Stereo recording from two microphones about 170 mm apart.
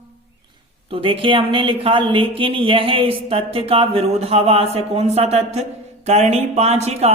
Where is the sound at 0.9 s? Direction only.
30° right (ahead or behind).